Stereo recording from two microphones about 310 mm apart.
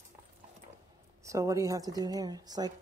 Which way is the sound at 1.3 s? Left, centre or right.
Centre.